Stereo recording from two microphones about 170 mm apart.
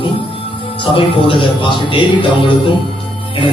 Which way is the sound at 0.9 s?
30° left (ahead or behind).